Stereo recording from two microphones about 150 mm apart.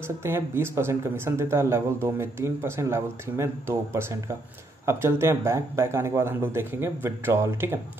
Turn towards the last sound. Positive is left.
turn(degrees=-15)  # may be behind; listen again after turning